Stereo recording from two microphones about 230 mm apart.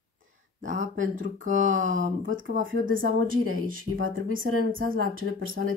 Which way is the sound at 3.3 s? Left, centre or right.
Right.